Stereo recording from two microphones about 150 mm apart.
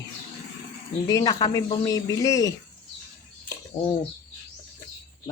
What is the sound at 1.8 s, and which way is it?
Speech, 25° left (ahead or behind).